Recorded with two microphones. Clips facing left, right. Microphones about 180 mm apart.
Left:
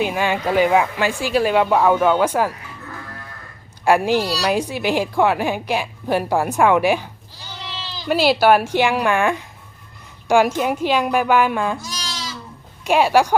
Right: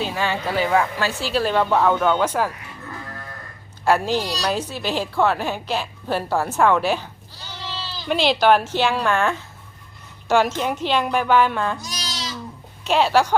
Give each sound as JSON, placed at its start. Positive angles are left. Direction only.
{"t": 0.0, "sound": "a woman's voice", "side_deg": 15}
{"t": 3.8, "sound": "a woman's voice", "side_deg": 15}
{"t": 11.8, "sound": "goat", "side_deg": -20}
{"t": 12.8, "sound": "a woman's voice", "side_deg": 10}